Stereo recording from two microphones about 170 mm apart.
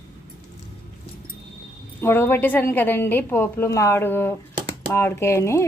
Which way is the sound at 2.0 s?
15° left (ahead or behind).